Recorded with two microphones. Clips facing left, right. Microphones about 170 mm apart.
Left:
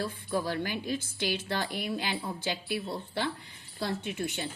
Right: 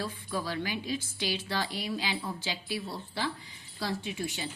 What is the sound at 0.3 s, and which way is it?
A woman's voice, 50° left (ahead or behind).